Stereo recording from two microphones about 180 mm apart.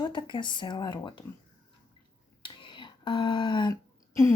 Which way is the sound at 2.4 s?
25° left (ahead or behind).